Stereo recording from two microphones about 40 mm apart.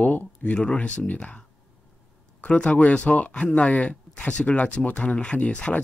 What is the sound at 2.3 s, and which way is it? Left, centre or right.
Speech, left.